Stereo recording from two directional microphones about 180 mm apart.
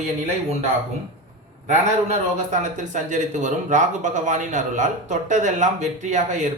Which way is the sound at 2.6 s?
45° right (ahead or behind).